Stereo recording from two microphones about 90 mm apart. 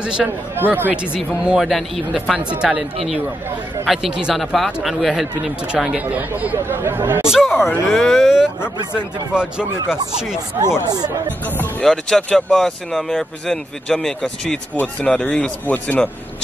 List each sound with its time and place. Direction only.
0.0 s speech: 10° right (ahead or behind)
0.6 s speech: 20° right (ahead or behind)
1.1 s speech: 10° right (ahead or behind); by 7.2 s 25° right (ahead or behind)
7.2 s speech: 5° right (ahead or behind)
11.8 s speech: 5° left (ahead or behind)